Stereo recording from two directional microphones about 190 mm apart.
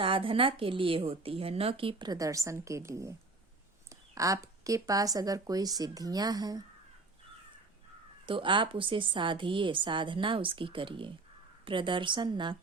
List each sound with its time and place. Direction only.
0.0 s speech: 30° right (ahead or behind)
8.3 s speech: 25° right (ahead or behind)